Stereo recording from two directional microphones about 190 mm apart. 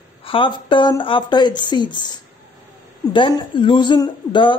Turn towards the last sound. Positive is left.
turn(degrees=25)  # may be behind; listen again after turning